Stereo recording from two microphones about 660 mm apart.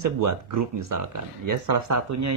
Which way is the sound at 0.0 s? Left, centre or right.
Right.